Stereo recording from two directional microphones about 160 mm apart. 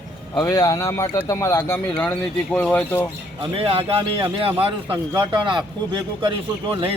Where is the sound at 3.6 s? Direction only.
35° right (ahead or behind).